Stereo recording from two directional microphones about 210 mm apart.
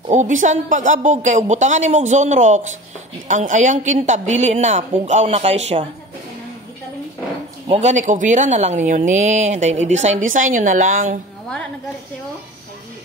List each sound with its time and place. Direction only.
0.1 s speech: 35° right (ahead or behind)
7.6 s speech: 30° right (ahead or behind)